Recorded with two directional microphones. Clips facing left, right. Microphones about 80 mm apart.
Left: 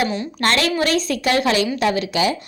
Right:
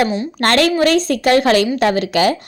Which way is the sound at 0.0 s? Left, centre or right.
Right.